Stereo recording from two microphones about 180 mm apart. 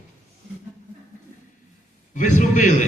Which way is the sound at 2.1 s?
45° left (ahead or behind).